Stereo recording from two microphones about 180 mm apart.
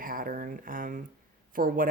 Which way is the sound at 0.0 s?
50° right (ahead or behind).